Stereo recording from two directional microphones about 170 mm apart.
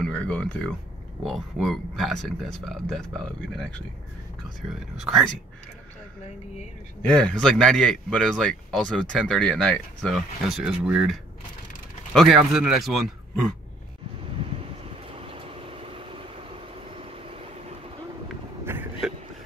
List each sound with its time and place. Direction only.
0.0 s speech: 5° left (ahead or behind)
4.9 s speech: centre (ahead or behind)
7.0 s speech: 5° left (ahead or behind)
15.0 s vehicle: 30° right (ahead or behind)
18.7 s a sound: 5° right (ahead or behind)